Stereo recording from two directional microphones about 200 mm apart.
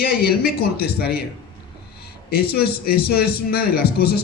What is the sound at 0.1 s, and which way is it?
A man's voice, 50° left (ahead or behind).